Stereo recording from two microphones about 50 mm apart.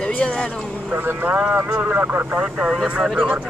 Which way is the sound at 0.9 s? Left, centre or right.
Right.